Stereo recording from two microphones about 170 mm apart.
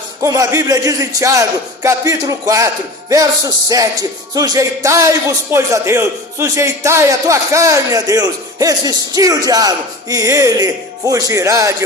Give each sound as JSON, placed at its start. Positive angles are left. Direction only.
{"t": 0.2, "sound": "a man's voice", "side_deg": -20}